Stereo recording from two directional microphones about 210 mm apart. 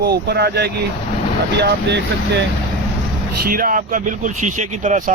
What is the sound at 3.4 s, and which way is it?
Speech, 40° right (ahead or behind).